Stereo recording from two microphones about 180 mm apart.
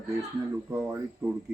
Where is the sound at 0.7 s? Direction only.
15° right (ahead or behind).